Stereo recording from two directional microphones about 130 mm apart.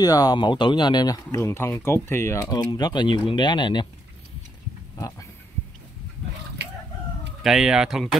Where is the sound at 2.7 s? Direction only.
35° left (ahead or behind).